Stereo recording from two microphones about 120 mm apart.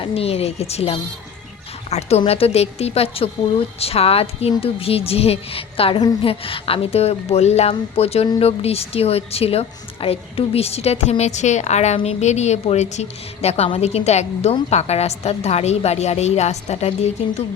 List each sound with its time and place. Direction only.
0.0 s a woman's voice: 55° left (ahead or behind)